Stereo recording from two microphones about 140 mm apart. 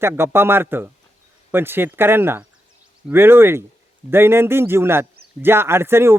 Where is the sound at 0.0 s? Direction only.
15° right (ahead or behind).